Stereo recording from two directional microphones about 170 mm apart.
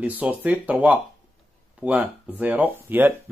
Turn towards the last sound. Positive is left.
turn(degrees=-10)  # may be behind; listen again after turning